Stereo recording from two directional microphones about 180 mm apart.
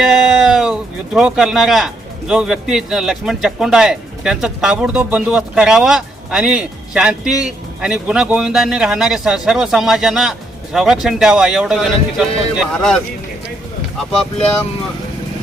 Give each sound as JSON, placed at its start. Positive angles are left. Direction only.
{"t": 0.1, "sound": "speech", "side_deg": 0}